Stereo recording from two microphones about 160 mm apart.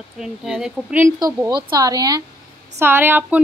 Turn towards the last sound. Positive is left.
turn(degrees=-10)  # may be behind; listen again after turning